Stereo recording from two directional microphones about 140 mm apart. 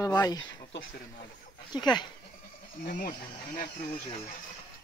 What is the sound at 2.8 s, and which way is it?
Speech, 90° left.